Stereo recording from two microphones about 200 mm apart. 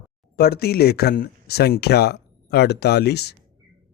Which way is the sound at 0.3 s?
50° left (ahead or behind).